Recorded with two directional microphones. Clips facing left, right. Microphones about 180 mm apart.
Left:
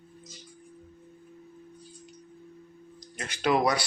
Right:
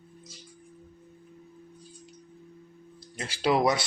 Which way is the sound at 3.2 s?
30° right (ahead or behind).